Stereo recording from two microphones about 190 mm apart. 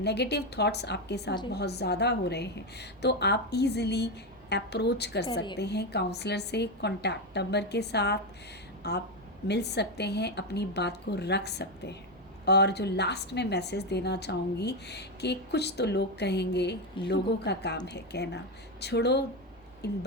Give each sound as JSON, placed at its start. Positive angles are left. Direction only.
{"t": 0.0, "sound": "a woman's voice", "side_deg": 60}